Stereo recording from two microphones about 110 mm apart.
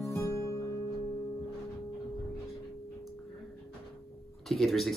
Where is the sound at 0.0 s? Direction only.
25° left (ahead or behind).